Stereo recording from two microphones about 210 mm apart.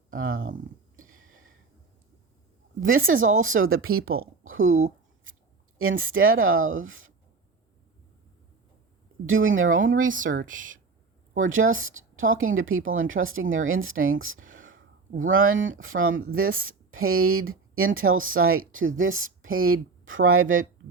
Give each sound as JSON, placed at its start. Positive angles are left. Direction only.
{"t": 0.3, "sound": "a woman's voice", "side_deg": -40}
{"t": 0.9, "sound": "a sound", "side_deg": -75}
{"t": 2.8, "sound": "speech", "side_deg": -75}
{"t": 5.8, "sound": "speech", "side_deg": -70}
{"t": 9.2, "sound": "speech", "side_deg": -70}
{"t": 9.7, "sound": "a woman's voice", "side_deg": -40}
{"t": 11.5, "sound": "speech", "side_deg": -70}